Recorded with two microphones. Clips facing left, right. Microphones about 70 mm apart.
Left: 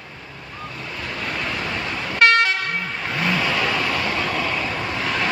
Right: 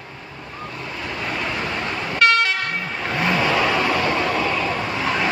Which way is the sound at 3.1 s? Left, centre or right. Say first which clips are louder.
Right 3 dB; centre.